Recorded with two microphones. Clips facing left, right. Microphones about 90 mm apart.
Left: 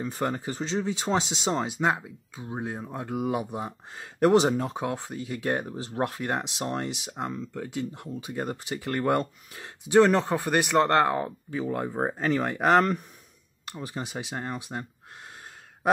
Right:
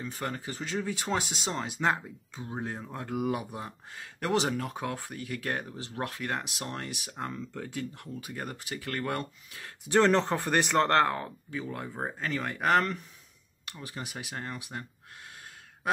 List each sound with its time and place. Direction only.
0.0 s speech: 30° left (ahead or behind)
1.8 s speech: 10° left (ahead or behind); by 9.7 s 30° left (ahead or behind)
9.8 s speech: 10° left (ahead or behind)
11.1 s speech: 25° left (ahead or behind)